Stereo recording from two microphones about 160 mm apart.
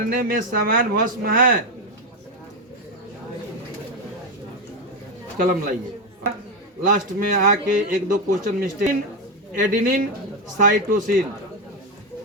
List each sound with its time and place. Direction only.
0.1 s a man's voice: 65° right (ahead or behind)
5.4 s a man's voice: 60° right (ahead or behind)
6.8 s a man's voice: 55° right (ahead or behind)